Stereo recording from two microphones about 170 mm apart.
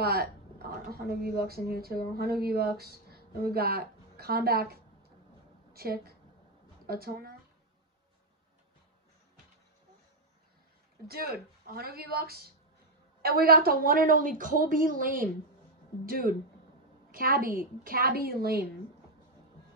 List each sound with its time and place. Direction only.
0.0 s a woman's voice: 65° right (ahead or behind)
11.1 s a woman's voice: 65° right (ahead or behind)